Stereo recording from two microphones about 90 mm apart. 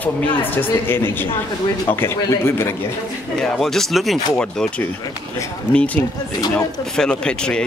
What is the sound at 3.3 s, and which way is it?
Speech, 5° left (ahead or behind).